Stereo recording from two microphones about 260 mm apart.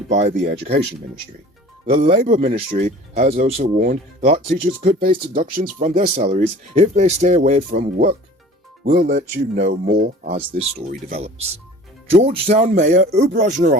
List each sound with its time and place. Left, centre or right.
0.1 s speech: right
1.9 s speech: right
12.1 s speech: right